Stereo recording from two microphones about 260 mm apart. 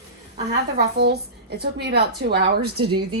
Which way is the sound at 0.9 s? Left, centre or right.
Right.